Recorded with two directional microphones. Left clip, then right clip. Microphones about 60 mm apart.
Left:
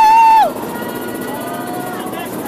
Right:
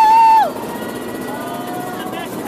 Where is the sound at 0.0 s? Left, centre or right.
Left.